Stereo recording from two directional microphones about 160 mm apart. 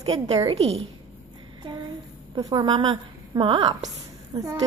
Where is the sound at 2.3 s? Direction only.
25° right (ahead or behind).